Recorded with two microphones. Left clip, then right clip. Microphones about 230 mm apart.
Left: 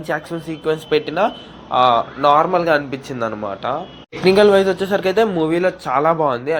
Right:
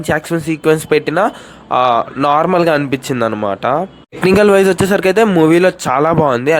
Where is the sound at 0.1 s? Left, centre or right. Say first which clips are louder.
Right 7 dB; right.